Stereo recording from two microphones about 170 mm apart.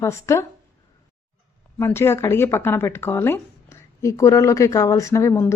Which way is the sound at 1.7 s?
15° left (ahead or behind).